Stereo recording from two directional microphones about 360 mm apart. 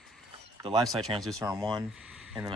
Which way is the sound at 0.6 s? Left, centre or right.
Centre.